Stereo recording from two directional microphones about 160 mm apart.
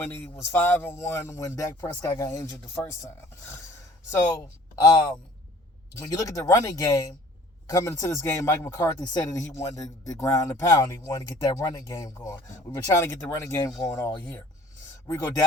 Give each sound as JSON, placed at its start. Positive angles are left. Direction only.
{"t": 0.0, "sound": "speech", "side_deg": 15}
{"t": 4.1, "sound": "speech", "side_deg": 20}